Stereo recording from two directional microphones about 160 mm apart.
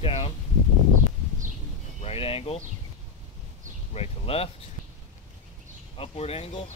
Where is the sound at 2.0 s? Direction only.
35° left (ahead or behind).